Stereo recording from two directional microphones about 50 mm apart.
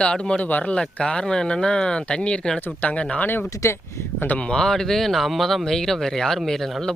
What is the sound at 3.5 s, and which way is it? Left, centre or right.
Speech, left.